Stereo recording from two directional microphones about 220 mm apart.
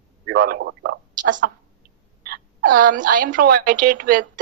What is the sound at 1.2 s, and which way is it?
A woman's voice, 35° right (ahead or behind).